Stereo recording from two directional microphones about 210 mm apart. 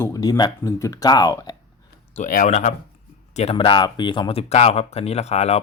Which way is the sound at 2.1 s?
40° left (ahead or behind).